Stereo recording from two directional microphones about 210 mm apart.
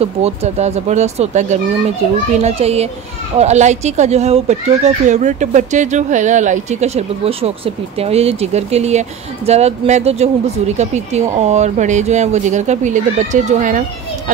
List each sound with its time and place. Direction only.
0.0 s a child's voice: 30° right (ahead or behind)
11.3 s speech: 30° right (ahead or behind)